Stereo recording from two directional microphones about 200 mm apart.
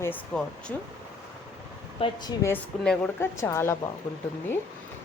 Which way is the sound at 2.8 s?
5° left (ahead or behind).